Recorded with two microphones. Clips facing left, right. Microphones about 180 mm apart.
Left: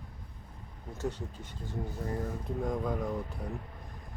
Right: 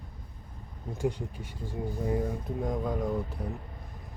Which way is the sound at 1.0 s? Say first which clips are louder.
Right 5 dB; 15° right (ahead or behind).